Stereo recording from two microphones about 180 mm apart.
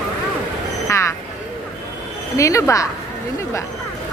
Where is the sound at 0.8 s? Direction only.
15° left (ahead or behind).